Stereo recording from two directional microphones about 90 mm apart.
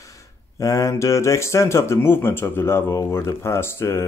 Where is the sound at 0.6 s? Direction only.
40° left (ahead or behind).